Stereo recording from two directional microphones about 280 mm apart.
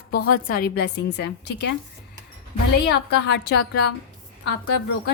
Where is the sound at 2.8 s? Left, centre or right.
Left.